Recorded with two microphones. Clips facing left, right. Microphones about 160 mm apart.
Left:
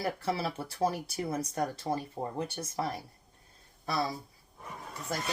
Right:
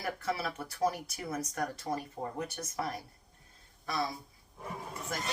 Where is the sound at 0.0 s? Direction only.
30° left (ahead or behind).